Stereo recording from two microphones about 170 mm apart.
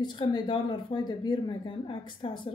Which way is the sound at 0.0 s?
25° left (ahead or behind).